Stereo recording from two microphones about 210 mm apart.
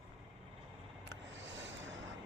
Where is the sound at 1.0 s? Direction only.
60° right (ahead or behind).